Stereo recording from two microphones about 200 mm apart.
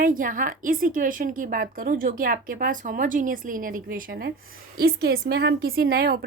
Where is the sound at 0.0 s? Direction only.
45° right (ahead or behind).